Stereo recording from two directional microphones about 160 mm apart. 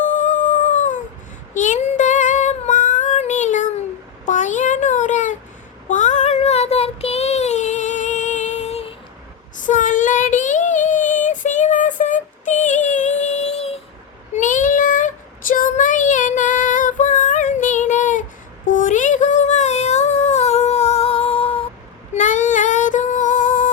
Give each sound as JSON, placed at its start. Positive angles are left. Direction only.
{"t": 0.0, "sound": "howl", "side_deg": 50}
{"t": 1.5, "sound": "female singing", "side_deg": 50}
{"t": 4.3, "sound": "a sound", "side_deg": 50}
{"t": 5.9, "sound": "child singing", "side_deg": 50}
{"t": 9.6, "sound": "child singing", "side_deg": 55}
{"t": 14.3, "sound": "child singing", "side_deg": 50}
{"t": 22.1, "sound": "child singing", "side_deg": 50}